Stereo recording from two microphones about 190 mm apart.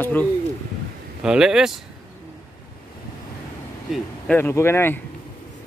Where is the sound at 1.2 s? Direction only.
5° right (ahead or behind).